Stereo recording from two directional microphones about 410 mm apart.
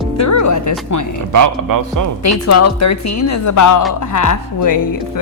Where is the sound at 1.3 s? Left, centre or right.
Right.